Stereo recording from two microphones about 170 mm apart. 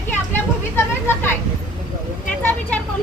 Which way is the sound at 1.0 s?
15° left (ahead or behind).